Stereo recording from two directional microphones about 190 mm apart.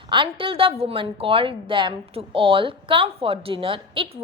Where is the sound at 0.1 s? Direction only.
25° right (ahead or behind).